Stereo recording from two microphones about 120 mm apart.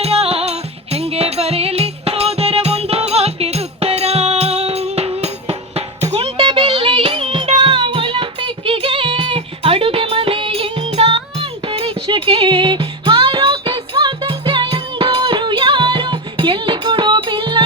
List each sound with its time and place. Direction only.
0.0 s music: 55° right (ahead or behind)
6.3 s music: 40° right (ahead or behind)